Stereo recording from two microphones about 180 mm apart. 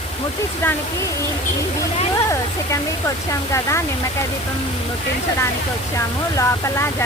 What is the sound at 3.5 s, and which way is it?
Speech, 15° left (ahead or behind).